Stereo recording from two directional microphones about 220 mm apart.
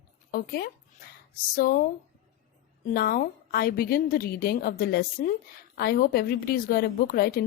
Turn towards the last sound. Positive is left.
turn(degrees=40)  # may be behind; listen again after turning